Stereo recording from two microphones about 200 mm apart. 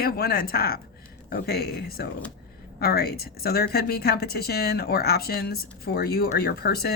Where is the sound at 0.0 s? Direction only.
50° left (ahead or behind).